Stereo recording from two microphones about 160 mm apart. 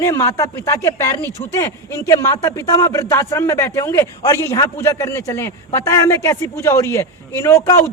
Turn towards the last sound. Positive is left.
turn(degrees=15)  # may be behind; listen again after turning